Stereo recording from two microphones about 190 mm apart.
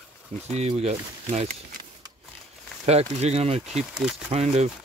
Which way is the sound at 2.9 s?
35° right (ahead or behind).